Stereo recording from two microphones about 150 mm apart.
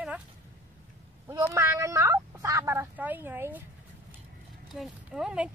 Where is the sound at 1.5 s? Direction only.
15° right (ahead or behind).